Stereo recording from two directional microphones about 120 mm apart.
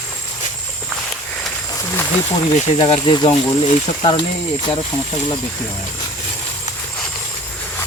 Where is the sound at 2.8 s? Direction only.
45° left (ahead or behind).